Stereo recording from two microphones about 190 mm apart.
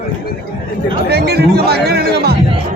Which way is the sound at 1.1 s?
55° right (ahead or behind).